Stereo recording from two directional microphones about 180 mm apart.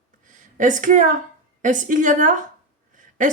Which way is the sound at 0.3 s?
45° right (ahead or behind).